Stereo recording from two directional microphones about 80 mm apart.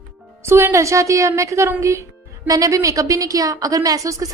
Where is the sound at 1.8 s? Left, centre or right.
Right.